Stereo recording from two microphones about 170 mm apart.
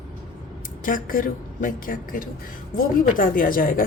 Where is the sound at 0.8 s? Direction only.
55° left (ahead or behind).